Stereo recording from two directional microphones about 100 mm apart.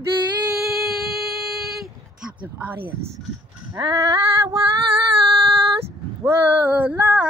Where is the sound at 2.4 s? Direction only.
20° right (ahead or behind).